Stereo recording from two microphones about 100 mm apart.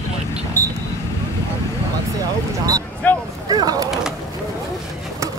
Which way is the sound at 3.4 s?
40° right (ahead or behind).